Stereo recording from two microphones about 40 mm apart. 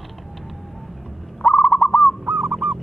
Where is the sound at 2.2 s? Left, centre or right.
Right.